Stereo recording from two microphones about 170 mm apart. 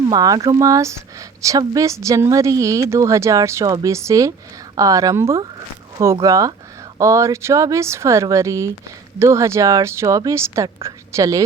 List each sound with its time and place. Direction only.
0.1 s speech: 25° right (ahead or behind)